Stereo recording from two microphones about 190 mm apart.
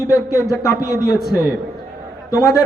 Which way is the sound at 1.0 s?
55° left (ahead or behind).